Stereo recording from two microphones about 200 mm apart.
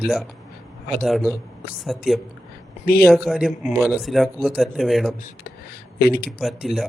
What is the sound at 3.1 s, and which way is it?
Speech, centre (ahead or behind).